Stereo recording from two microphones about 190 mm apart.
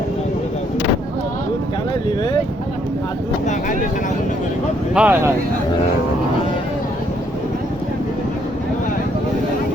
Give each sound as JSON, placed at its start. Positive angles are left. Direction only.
{"t": 3.4, "sound": "vehicle", "side_deg": 45}
{"t": 4.9, "sound": "speech", "side_deg": -10}